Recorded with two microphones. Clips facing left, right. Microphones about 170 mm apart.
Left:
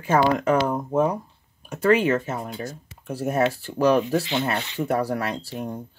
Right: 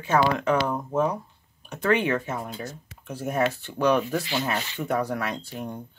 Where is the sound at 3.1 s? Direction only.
40° left (ahead or behind).